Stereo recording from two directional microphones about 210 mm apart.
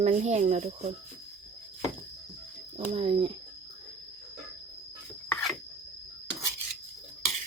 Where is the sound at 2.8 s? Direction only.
30° right (ahead or behind).